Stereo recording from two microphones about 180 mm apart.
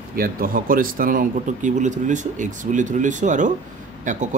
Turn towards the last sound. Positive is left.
turn(degrees=-45)  # may be behind; listen again after turning